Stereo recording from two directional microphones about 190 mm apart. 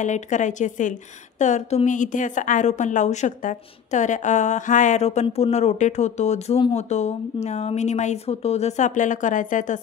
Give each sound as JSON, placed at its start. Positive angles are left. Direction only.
{"t": 0.0, "sound": "a woman's voice", "side_deg": 40}